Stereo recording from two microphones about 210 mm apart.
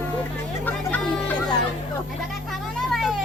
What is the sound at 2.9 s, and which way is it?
Vehicle, centre (ahead or behind).